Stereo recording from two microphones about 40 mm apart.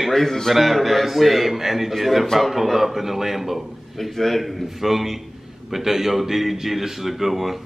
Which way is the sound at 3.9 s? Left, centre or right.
Centre.